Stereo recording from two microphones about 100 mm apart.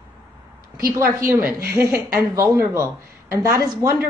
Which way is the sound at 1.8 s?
25° right (ahead or behind).